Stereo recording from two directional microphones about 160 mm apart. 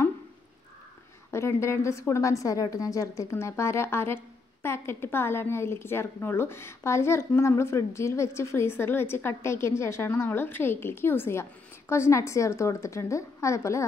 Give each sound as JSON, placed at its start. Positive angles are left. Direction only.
{"t": 1.3, "sound": "a woman's voice", "side_deg": 15}